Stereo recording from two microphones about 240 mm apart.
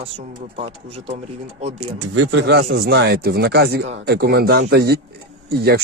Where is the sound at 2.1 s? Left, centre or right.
Right.